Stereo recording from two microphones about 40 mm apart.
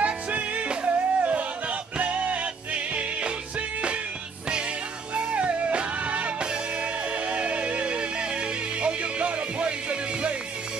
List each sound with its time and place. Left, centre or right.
0.0 s music: right
5.1 s music: right